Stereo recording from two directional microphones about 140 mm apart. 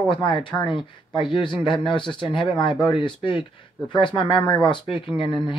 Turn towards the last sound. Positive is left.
turn(degrees=35)  # may be behind; listen again after turning